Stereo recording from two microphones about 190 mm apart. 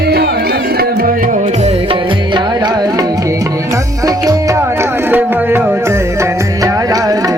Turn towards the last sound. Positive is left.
turn(degrees=-20)  # may be behind; listen again after turning